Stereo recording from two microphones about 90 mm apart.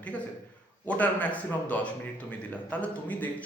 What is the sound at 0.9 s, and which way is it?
Speech, 15° left (ahead or behind).